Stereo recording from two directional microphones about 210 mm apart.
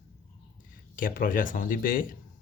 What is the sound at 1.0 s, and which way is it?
Speech, 40° left (ahead or behind).